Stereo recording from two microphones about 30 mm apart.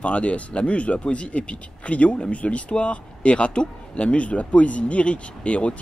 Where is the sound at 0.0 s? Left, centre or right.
Left.